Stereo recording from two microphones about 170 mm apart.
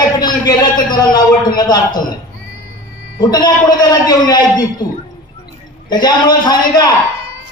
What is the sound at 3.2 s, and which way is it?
A man's voice, 25° left (ahead or behind).